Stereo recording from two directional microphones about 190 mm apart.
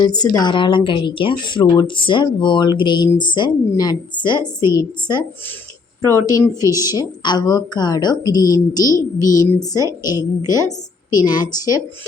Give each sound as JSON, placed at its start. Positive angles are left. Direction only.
{"t": 0.0, "sound": "a woman's voice", "side_deg": 20}